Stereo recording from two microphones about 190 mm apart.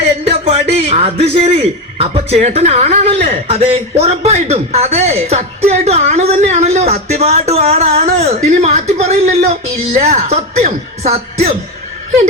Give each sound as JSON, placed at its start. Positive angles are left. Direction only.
{"t": 0.3, "sound": "a man's voice", "side_deg": -30}